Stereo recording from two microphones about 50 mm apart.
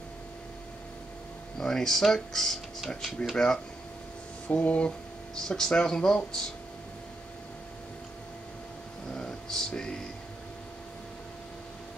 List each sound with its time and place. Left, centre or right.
1.6 s speech: centre
4.5 s speech: left
9.1 s a sound: centre